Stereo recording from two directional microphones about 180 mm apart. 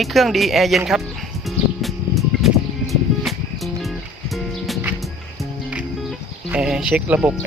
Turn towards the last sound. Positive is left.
turn(degrees=-10)  # may be behind; listen again after turning